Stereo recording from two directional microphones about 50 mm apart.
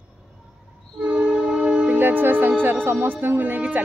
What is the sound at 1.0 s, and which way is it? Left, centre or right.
Train, right.